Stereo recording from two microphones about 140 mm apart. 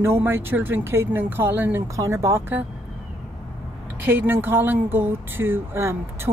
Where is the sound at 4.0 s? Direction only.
15° right (ahead or behind).